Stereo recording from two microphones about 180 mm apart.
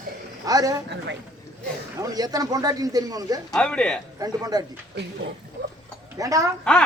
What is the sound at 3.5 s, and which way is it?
Speech, 5° left (ahead or behind).